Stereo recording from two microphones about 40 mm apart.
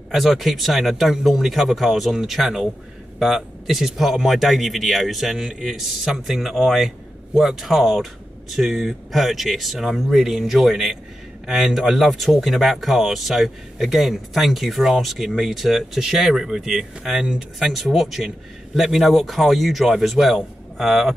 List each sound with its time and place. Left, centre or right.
0.1 s speech: centre